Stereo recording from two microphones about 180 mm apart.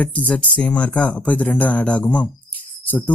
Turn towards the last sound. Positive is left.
turn(degrees=10)  # may be behind; listen again after turning